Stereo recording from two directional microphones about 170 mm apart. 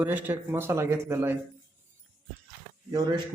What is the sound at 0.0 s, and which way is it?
A man's voice, 10° right (ahead or behind).